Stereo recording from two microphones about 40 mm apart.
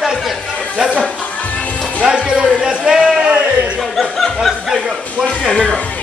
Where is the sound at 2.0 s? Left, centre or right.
Centre.